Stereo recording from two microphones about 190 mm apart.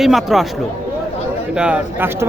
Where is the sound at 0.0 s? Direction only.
Centre (ahead or behind).